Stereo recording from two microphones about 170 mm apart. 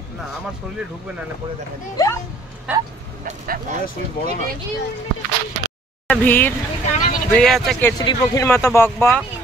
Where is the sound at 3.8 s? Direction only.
55° left (ahead or behind).